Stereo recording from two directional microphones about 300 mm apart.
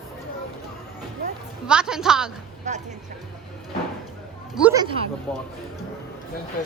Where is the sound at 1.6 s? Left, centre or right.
Centre.